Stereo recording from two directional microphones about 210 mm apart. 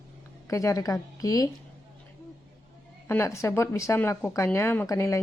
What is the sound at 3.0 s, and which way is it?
Speech, 10° left (ahead or behind).